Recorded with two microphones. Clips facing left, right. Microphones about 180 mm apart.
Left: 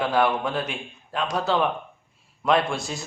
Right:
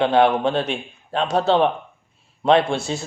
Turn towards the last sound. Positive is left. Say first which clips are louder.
# right 5 dB
turn(degrees=-30)  # may be behind; listen again after turning